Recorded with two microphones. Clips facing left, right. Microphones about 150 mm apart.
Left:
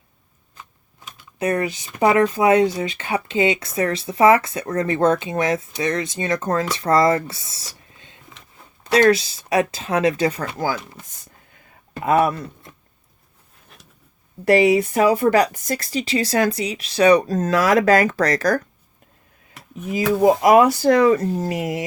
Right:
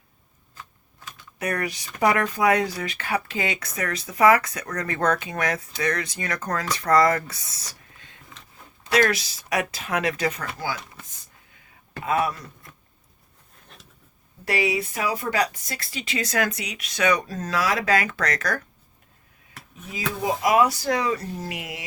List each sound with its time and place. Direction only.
0.5 s speech: 20° left (ahead or behind)
12.0 s speech: 50° left (ahead or behind)
14.4 s speech: 50° left (ahead or behind)
19.9 s speech: 50° left (ahead or behind)